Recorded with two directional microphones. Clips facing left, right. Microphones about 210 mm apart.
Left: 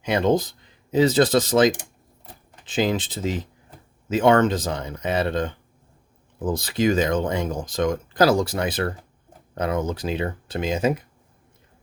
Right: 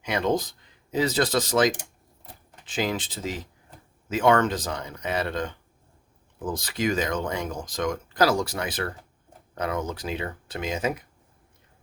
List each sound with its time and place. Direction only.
0.0 s speech: 25° left (ahead or behind)